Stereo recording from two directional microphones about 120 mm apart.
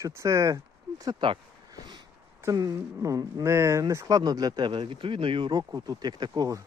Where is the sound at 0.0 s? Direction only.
25° right (ahead or behind).